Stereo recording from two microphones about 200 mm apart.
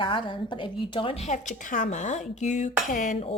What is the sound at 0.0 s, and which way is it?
A woman's voice, 25° left (ahead or behind).